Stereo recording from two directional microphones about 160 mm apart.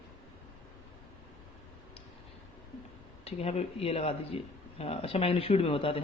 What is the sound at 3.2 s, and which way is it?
Speech, 40° left (ahead or behind).